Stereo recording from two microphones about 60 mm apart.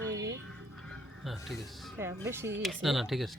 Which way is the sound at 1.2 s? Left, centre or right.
Centre.